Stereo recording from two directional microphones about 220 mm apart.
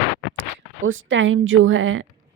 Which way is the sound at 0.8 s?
60° right (ahead or behind).